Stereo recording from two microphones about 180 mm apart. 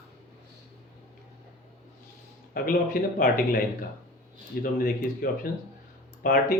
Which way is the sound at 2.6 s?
55° left (ahead or behind).